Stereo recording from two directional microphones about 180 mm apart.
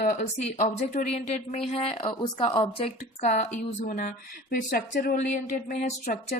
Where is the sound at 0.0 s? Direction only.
40° left (ahead or behind).